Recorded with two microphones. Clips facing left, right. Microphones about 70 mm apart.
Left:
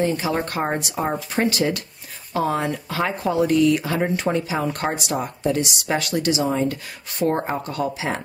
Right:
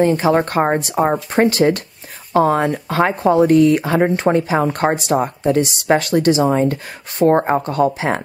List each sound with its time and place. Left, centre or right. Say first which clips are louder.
0.0 s speech: right 8 dB; right